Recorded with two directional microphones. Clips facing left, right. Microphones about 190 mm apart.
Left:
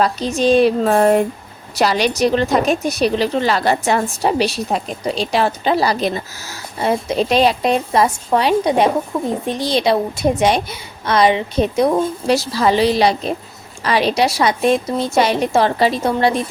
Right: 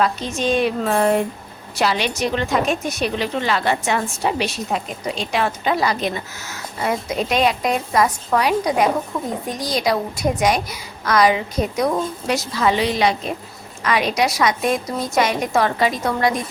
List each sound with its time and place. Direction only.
0.0 s a woman's voice: 35° left (ahead or behind)